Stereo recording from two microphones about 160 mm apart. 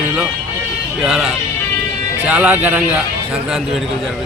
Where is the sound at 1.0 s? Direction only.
Centre (ahead or behind).